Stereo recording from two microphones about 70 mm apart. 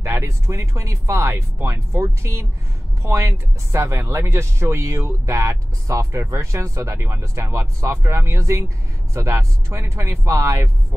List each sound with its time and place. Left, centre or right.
0.0 s speech: right